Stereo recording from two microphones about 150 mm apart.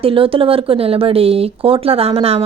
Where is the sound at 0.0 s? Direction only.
35° right (ahead or behind).